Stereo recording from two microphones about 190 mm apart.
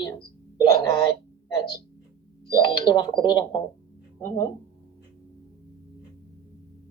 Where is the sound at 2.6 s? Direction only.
25° left (ahead or behind).